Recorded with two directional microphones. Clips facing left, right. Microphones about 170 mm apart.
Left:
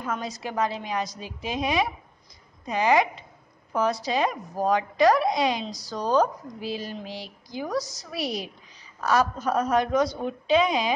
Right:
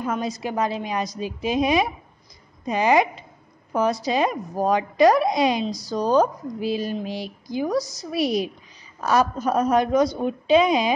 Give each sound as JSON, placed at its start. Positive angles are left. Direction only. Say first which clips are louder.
{"t": 0.0, "sound": "a woman's voice", "louder": "right 5 dB", "side_deg": -15}